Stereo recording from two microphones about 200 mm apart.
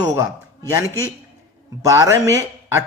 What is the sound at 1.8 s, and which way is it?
Speech, 15° right (ahead or behind).